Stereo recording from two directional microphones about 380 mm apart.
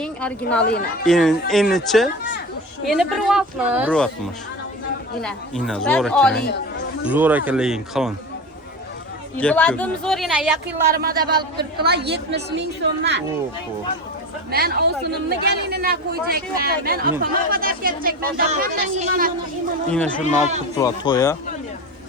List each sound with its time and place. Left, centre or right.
0.0 s children playing: centre
0.6 s speech: left
1.0 s a woman's voice: centre
5.2 s a woman's voice: centre
9.4 s a woman's voice: centre
10.9 s speech: right
14.5 s speech: right
19.9 s a woman's voice: centre